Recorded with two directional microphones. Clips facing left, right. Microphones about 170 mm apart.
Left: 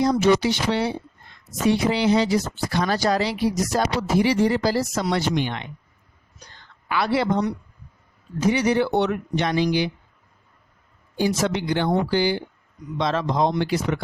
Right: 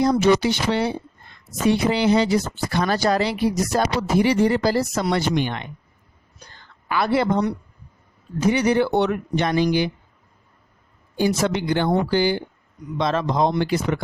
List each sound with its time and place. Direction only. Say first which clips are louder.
0.0 s speech: right 1 dB; 55° right (ahead or behind)
6.8 s speech: right 2 dB; 45° right (ahead or behind)
11.2 s speech: right 2 dB; 55° right (ahead or behind)